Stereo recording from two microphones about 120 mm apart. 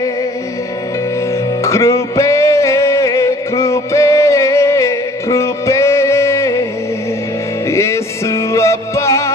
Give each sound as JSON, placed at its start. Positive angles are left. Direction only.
{"t": 1.6, "sound": "music", "side_deg": 25}
{"t": 7.6, "sound": "music", "side_deg": 25}